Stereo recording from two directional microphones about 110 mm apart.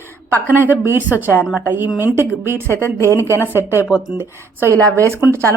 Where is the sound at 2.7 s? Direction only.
20° left (ahead or behind).